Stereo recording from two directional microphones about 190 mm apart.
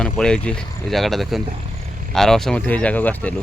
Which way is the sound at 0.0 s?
5° left (ahead or behind).